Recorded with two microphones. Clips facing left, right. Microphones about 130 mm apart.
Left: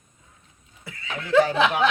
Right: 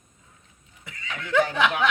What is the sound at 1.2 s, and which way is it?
Speech, 10° left (ahead or behind).